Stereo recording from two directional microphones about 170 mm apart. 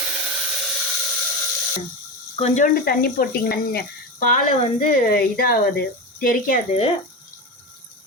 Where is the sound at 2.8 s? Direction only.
65° left (ahead or behind).